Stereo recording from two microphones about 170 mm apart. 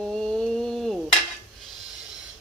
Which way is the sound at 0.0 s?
5° left (ahead or behind).